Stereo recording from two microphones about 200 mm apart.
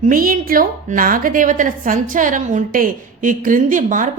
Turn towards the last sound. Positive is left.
turn(degrees=-40)  # may be behind; listen again after turning